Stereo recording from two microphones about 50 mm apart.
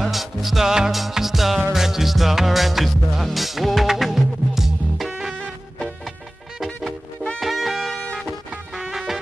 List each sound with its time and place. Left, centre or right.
0.0 s music: centre
5.3 s music: centre
7.3 s music: centre
7.9 s music: centre
8.2 s music: centre